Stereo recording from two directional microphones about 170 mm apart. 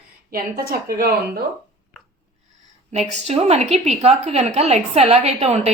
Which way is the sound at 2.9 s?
40° right (ahead or behind).